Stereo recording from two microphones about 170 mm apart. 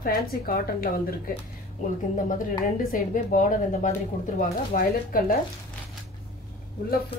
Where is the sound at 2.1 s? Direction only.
55° left (ahead or behind).